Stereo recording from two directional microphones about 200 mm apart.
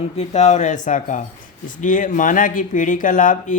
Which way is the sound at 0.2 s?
35° left (ahead or behind).